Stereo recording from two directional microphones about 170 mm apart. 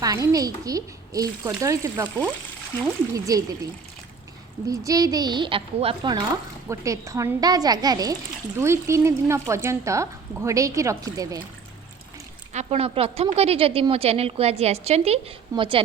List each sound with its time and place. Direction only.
0.0 s speech: 20° right (ahead or behind)
4.7 s speech: 20° right (ahead or behind)
12.5 s a woman's voice: 35° right (ahead or behind)